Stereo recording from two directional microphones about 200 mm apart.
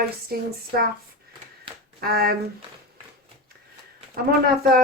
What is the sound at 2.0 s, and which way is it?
Speech, 50° right (ahead or behind).